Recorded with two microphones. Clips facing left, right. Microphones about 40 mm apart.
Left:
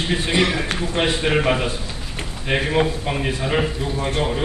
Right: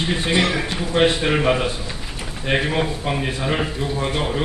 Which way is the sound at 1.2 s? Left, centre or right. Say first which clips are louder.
Even; centre.